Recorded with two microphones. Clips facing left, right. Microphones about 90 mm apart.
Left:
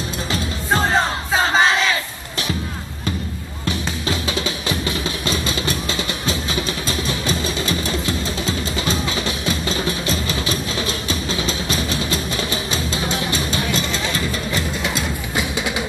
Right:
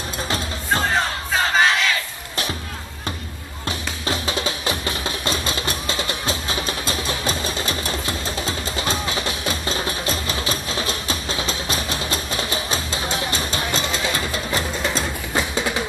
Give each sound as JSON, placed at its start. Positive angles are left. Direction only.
{"t": 0.9, "sound": "crowd", "side_deg": 30}
{"t": 3.6, "sound": "music", "side_deg": -40}